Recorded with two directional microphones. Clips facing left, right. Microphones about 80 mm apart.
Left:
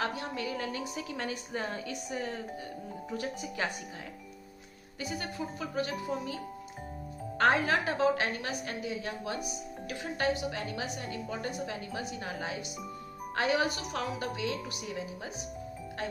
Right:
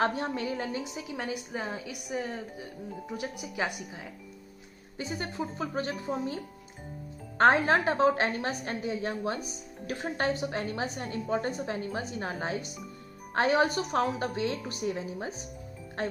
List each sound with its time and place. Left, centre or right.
0.0 s a woman's voice: right; by 3.8 s centre
4.9 s a woman's voice: right